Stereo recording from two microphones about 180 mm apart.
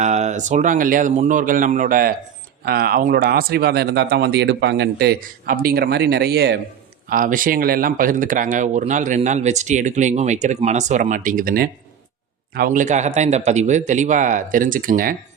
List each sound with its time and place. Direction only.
0.0 s speech: 40° right (ahead or behind); by 6.6 s 65° right (ahead or behind)
7.1 s speech: 50° right (ahead or behind)